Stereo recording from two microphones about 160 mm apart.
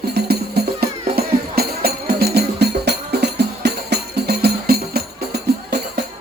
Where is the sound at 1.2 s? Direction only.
75° right (ahead or behind).